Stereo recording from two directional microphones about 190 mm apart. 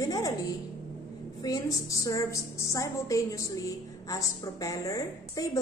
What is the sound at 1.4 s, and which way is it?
A woman's voice, 20° left (ahead or behind).